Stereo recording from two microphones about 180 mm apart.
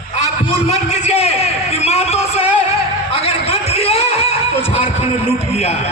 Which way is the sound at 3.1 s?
35° left (ahead or behind).